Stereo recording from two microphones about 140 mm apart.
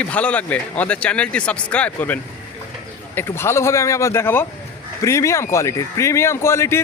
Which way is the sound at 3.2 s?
15° left (ahead or behind).